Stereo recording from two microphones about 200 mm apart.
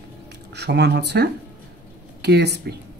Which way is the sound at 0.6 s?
55° right (ahead or behind).